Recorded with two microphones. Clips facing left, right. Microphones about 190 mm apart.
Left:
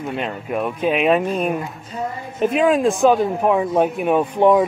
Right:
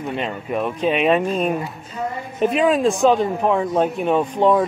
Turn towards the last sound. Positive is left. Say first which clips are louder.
# left 2 dB
turn(degrees=10)  # may be behind; listen again after turning